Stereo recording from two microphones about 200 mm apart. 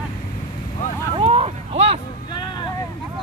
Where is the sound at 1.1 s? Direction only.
25° right (ahead or behind).